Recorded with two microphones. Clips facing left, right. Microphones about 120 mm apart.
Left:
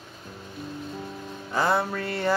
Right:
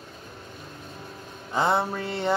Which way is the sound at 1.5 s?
20° right (ahead or behind).